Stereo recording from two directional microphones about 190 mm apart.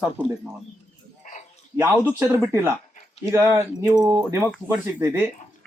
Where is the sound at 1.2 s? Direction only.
40° left (ahead or behind).